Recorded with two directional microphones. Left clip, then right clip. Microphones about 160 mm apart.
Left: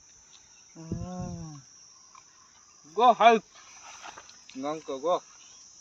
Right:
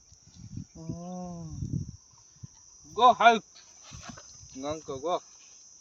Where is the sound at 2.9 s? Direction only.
15° right (ahead or behind).